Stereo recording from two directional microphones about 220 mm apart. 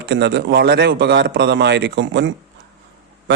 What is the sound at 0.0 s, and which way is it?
A man's voice, 50° right (ahead or behind).